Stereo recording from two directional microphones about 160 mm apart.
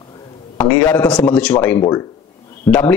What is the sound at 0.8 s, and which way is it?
A man's voice, 10° left (ahead or behind).